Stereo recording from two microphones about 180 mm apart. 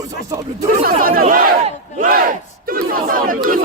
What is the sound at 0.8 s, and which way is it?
Chatter, 55° right (ahead or behind).